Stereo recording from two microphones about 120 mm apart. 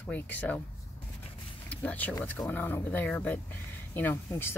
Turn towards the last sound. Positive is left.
turn(degrees=20)  # may be behind; listen again after turning